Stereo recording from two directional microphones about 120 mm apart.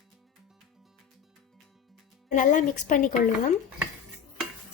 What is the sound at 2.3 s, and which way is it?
Speech, 90° left.